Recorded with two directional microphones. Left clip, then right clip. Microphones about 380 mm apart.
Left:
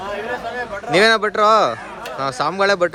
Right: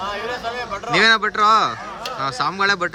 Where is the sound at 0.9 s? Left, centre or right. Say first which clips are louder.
Left 1 dB; centre.